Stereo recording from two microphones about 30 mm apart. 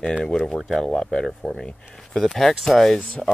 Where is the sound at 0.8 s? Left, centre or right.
Left.